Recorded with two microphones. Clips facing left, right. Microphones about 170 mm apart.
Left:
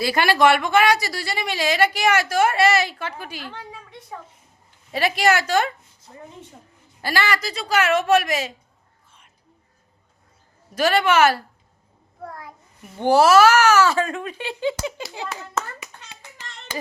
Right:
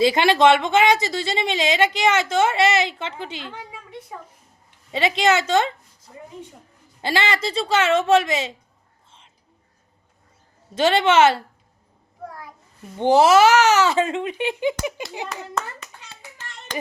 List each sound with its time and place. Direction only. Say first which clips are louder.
0.0 s speech: right 2 dB; 20° right (ahead or behind)
4.9 s speech: right 1 dB; 20° right (ahead or behind)
7.0 s speech: right 1 dB; 20° right (ahead or behind)
9.0 s whispering: right 3 dB; 25° right (ahead or behind)
10.8 s speech: right 1 dB; 25° right (ahead or behind)
13.0 s speech: even; 20° right (ahead or behind)
15.3 s hands: even; 5° left (ahead or behind)